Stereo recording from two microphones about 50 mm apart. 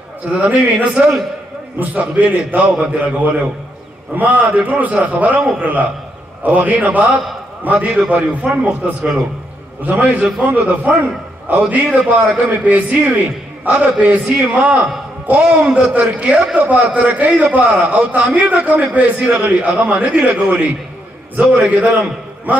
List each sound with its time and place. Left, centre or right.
0.2 s a man's voice: right
9.8 s a man's voice: right
11.4 s a man's voice: right